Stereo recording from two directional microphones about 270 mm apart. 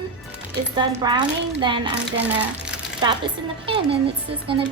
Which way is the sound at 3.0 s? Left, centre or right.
Centre.